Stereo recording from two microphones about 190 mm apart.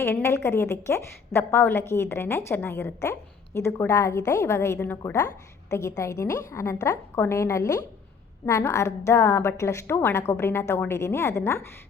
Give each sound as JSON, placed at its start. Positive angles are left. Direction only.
{"t": 0.0, "sound": "a woman's voice", "side_deg": 10}